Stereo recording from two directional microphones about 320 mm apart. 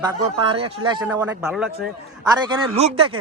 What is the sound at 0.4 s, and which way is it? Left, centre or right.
Speech, centre.